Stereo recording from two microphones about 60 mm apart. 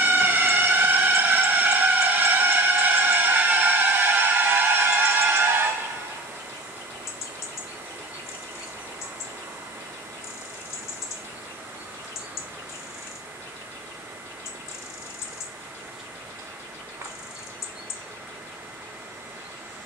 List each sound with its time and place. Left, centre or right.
0.0 s fire engine: right
2.1 s music: right